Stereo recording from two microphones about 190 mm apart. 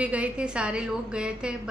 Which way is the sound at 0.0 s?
5° right (ahead or behind).